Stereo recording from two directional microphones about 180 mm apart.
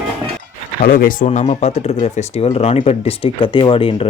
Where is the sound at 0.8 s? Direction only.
50° left (ahead or behind).